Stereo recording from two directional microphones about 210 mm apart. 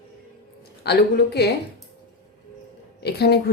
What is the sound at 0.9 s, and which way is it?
Speech, 50° left (ahead or behind).